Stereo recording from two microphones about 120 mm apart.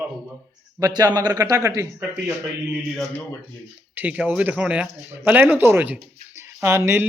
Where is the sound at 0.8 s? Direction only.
30° right (ahead or behind).